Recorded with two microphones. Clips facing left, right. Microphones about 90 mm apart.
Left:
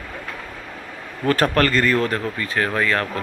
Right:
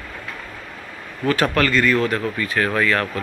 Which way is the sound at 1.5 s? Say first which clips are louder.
Even; 40° left (ahead or behind).